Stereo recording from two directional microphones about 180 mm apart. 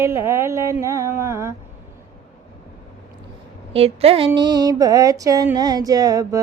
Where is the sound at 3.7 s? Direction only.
35° right (ahead or behind).